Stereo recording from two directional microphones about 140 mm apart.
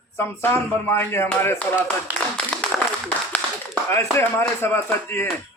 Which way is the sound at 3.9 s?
15° left (ahead or behind).